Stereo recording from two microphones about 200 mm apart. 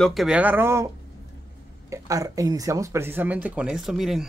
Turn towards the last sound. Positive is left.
turn(degrees=0)  # may be behind; listen again after turning